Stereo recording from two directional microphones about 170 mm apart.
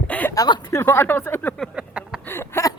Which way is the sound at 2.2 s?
15° left (ahead or behind).